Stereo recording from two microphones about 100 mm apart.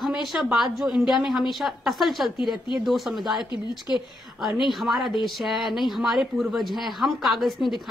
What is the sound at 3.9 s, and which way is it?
Speech, 20° right (ahead or behind).